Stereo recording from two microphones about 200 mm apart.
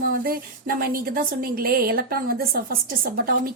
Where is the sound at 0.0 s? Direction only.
50° right (ahead or behind).